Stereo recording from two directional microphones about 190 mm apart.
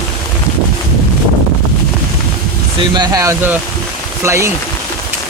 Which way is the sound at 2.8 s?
20° right (ahead or behind).